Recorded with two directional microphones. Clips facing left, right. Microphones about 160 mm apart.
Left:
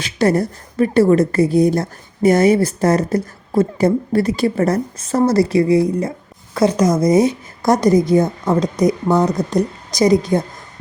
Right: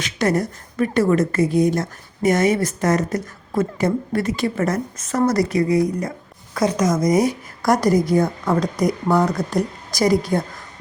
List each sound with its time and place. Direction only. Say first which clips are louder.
0.0 s a woman's voice: left 4 dB; 30° left (ahead or behind)